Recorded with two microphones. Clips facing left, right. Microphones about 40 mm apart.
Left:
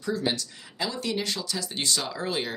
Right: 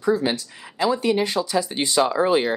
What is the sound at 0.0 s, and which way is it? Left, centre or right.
Speech, right.